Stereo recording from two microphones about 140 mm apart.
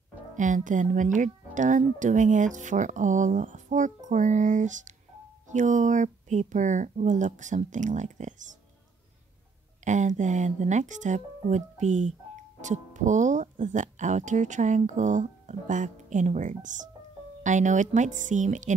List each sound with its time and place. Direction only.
0.4 s speech: 65° right (ahead or behind)
9.8 s speech: 60° right (ahead or behind)